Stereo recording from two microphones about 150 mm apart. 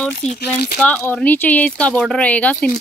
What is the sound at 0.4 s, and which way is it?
Speech, 90° left.